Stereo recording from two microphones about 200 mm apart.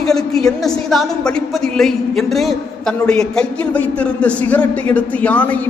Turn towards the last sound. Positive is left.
turn(degrees=5)  # may be behind; listen again after turning